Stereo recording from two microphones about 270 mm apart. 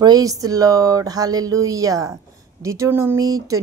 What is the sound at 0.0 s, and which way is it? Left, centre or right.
Speech, centre.